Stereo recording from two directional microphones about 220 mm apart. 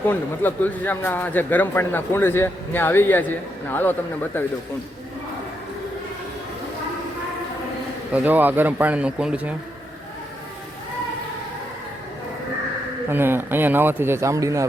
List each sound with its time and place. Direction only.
0.0 s a man's voice: 10° left (ahead or behind)
8.1 s speech: 10° right (ahead or behind)
13.1 s speech: 10° right (ahead or behind)